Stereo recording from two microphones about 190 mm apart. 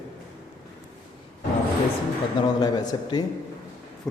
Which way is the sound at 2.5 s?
20° left (ahead or behind).